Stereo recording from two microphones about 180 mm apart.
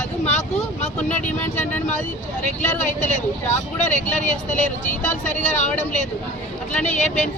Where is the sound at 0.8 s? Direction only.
40° left (ahead or behind).